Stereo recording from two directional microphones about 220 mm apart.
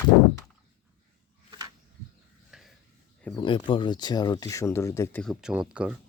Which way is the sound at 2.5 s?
Centre (ahead or behind).